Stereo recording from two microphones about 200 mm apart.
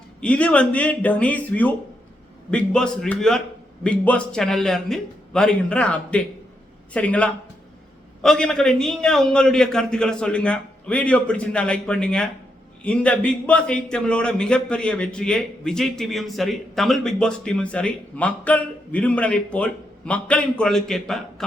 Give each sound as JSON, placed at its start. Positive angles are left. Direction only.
{"t": 0.2, "sound": "a man's voice", "side_deg": 5}